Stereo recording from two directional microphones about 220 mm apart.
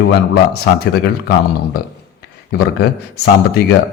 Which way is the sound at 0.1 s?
45° left (ahead or behind).